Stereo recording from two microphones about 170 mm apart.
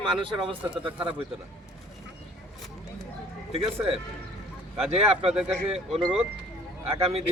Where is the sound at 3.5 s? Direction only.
35° right (ahead or behind).